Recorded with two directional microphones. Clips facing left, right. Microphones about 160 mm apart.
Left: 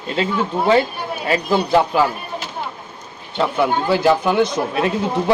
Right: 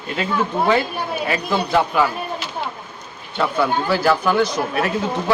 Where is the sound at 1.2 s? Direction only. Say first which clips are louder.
Left 5 dB; 30° left (ahead or behind).